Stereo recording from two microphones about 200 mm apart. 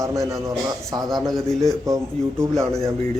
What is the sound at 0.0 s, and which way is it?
Speech, 15° right (ahead or behind).